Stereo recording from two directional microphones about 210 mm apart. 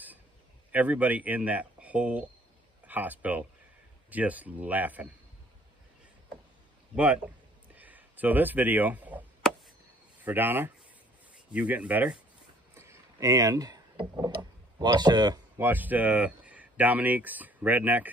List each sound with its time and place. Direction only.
0.7 s speech: 5° right (ahead or behind)
7.7 s a sound: 10° right (ahead or behind)
10.2 s speech: 10° right (ahead or behind)
12.7 s vehicle: 10° right (ahead or behind)
14.8 s speech: 20° right (ahead or behind)